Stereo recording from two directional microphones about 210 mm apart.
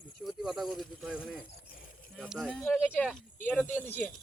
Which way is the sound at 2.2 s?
Centre (ahead or behind).